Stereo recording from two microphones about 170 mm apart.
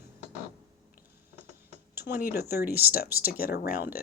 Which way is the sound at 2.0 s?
60° left (ahead or behind).